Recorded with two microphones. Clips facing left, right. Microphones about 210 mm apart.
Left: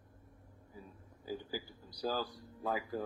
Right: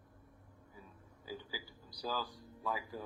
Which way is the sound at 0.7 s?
40° left (ahead or behind).